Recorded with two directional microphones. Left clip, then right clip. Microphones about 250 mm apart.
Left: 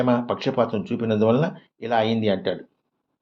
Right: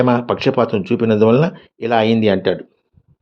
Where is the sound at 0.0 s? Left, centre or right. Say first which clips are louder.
Right 7 dB; right.